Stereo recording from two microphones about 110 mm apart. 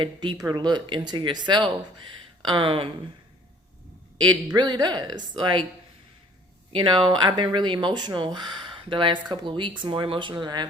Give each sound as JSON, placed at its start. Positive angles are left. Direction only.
{"t": 0.0, "sound": "speech", "side_deg": -45}
{"t": 4.2, "sound": "speech", "side_deg": -40}
{"t": 6.7, "sound": "speech", "side_deg": -45}